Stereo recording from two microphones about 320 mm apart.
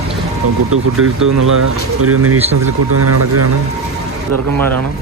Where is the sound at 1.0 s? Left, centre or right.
Right.